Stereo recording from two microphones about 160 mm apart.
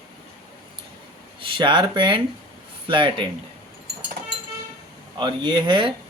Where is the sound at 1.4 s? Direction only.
30° right (ahead or behind).